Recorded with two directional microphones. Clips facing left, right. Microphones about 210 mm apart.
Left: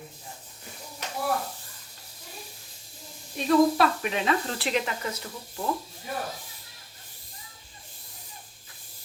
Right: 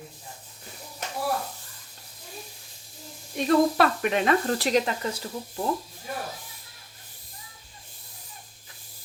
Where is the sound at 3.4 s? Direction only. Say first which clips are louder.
Even; 55° right (ahead or behind); by 5.1 s 40° right (ahead or behind).